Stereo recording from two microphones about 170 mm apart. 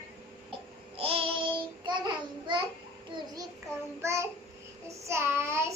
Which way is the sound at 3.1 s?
30° right (ahead or behind).